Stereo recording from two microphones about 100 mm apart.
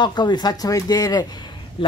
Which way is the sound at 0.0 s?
45° left (ahead or behind).